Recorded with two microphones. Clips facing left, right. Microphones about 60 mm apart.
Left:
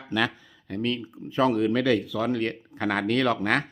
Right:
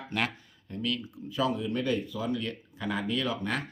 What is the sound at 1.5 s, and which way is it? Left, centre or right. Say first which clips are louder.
Speech: left 7 dB; left.